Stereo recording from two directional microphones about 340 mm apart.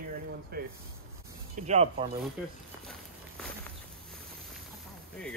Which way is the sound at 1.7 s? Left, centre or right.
Centre.